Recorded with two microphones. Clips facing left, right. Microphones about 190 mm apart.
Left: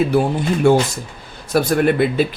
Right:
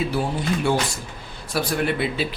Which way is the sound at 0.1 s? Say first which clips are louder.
Left 7 dB; 50° left (ahead or behind).